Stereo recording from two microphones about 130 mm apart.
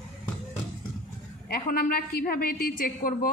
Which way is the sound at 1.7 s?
90° left.